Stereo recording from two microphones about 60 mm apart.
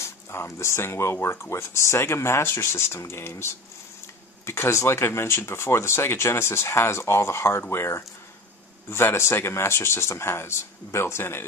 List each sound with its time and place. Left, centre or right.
0.0 s speech: left